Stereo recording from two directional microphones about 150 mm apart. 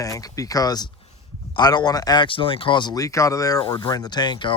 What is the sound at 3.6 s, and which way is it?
Speech, 30° left (ahead or behind).